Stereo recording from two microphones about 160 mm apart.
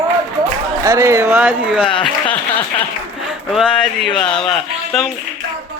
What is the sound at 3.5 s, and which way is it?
A man's voice, centre (ahead or behind).